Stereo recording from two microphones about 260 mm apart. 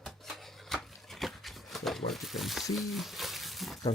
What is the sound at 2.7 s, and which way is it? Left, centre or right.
Speech, centre.